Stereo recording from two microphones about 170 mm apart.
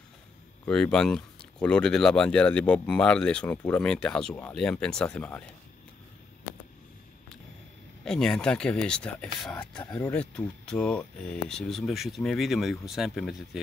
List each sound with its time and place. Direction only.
0.7 s speech: 5° left (ahead or behind)
8.0 s speech: 5° left (ahead or behind)